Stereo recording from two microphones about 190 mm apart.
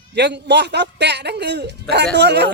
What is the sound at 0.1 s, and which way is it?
Speech, 65° right (ahead or behind).